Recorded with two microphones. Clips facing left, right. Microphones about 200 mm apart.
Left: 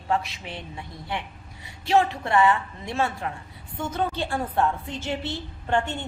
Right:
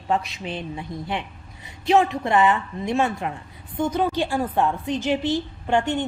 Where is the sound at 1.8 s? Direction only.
20° right (ahead or behind).